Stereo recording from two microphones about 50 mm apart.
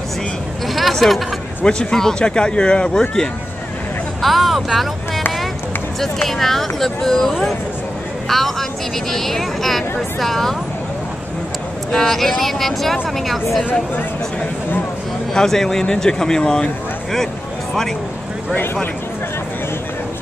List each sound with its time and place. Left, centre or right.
1.0 s speech: centre
1.7 s speech: centre
4.2 s speech: centre
6.2 s speech: centre
11.9 s speech: centre
15.3 s speech: centre